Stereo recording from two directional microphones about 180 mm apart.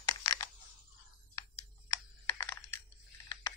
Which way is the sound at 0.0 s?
20° left (ahead or behind).